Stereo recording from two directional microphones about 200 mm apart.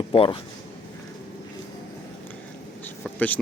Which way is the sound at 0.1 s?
30° left (ahead or behind).